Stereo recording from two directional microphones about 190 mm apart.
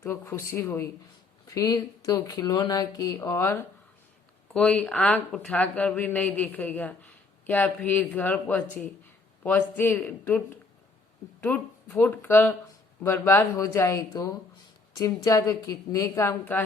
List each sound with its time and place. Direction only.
0.0 s speech: 10° left (ahead or behind)